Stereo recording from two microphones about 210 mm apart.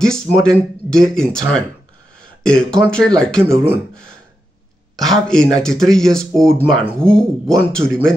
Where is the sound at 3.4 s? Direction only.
10° right (ahead or behind).